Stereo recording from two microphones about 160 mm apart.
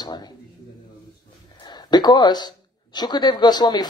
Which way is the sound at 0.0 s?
25° left (ahead or behind).